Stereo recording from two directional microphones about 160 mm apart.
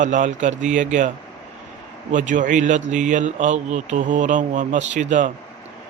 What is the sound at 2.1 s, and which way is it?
A man's voice, 50° right (ahead or behind).